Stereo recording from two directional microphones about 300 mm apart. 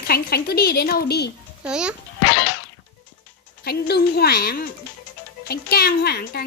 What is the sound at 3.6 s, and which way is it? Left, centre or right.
Speech, left.